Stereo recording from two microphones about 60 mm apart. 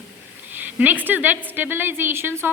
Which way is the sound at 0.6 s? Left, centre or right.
Right.